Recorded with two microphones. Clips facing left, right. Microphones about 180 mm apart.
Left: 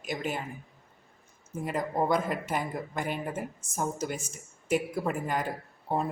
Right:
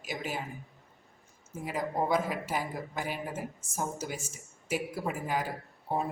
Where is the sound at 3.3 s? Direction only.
60° left (ahead or behind).